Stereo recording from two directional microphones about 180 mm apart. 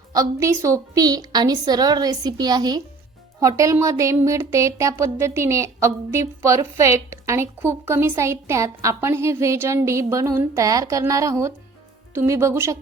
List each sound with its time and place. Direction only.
0.1 s a woman's voice: 20° right (ahead or behind)